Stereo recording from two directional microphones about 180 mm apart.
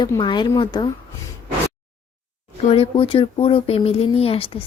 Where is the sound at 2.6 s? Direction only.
30° left (ahead or behind).